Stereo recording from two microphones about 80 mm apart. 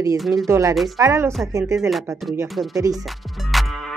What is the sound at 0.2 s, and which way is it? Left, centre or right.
Speech, centre.